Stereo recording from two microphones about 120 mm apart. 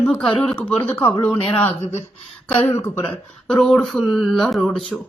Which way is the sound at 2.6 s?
20° left (ahead or behind).